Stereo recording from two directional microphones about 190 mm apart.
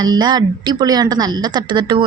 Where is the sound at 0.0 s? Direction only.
20° right (ahead or behind).